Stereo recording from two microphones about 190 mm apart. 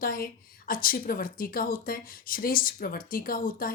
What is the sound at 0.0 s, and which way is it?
Speech, 50° left (ahead or behind).